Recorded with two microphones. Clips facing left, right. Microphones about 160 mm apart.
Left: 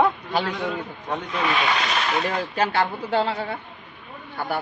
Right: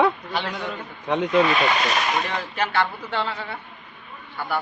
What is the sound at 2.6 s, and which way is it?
Speech, 40° left (ahead or behind).